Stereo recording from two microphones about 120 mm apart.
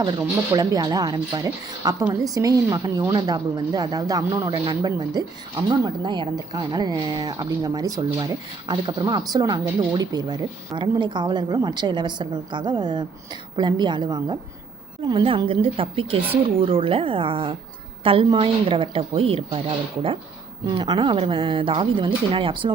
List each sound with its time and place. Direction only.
0.0 s speech: 35° right (ahead or behind)
4.4 s speech: 35° right (ahead or behind)
20.7 s speech: 35° right (ahead or behind)